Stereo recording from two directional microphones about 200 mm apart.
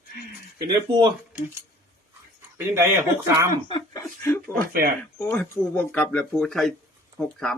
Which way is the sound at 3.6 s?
25° left (ahead or behind).